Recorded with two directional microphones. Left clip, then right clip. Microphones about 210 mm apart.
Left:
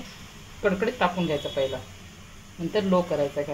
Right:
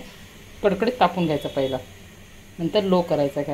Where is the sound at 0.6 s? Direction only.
35° right (ahead or behind).